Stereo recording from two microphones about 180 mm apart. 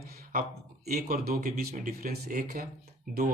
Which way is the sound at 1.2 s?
50° right (ahead or behind).